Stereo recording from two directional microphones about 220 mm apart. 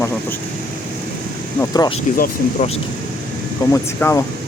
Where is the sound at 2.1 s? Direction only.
40° left (ahead or behind).